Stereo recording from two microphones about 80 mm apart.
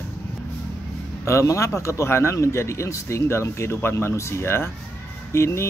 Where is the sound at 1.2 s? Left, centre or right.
Left.